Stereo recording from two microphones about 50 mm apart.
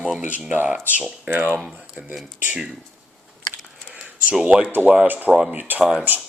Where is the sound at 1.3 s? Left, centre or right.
Right.